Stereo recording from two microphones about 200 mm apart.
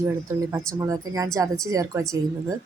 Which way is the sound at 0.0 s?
15° right (ahead or behind).